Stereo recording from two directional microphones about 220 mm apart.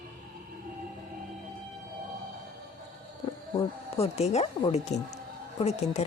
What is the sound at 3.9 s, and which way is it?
Speech, 30° left (ahead or behind).